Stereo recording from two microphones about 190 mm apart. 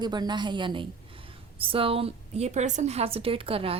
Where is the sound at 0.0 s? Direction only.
20° right (ahead or behind).